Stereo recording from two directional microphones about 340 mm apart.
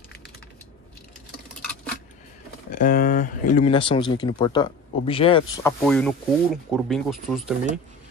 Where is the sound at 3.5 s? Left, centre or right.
Centre.